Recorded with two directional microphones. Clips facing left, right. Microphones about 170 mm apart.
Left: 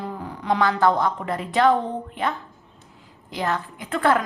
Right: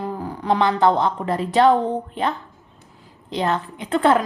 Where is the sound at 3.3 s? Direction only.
25° right (ahead or behind).